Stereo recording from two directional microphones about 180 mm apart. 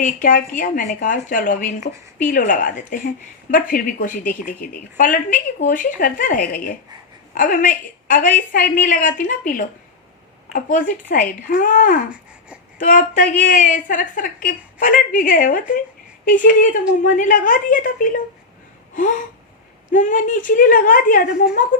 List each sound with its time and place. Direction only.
0.0 s a woman's voice: 50° left (ahead or behind)
19.9 s a woman's voice: 45° left (ahead or behind)